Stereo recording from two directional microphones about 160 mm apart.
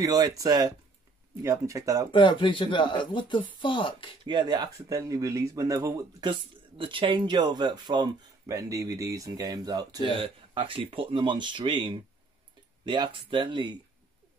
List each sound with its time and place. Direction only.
0.0 s speech: 25° right (ahead or behind)
2.1 s speech: 30° left (ahead or behind)
4.2 s speech: 30° right (ahead or behind)
6.8 s speech: 30° right (ahead or behind)